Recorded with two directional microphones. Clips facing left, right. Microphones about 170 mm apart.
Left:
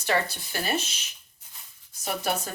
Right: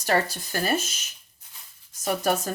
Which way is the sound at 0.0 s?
40° right (ahead or behind).